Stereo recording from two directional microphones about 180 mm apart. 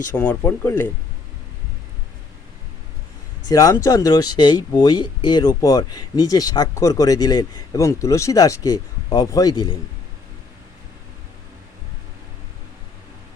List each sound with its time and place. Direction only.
0.2 s speech: 10° left (ahead or behind)
3.5 s speech: 15° left (ahead or behind)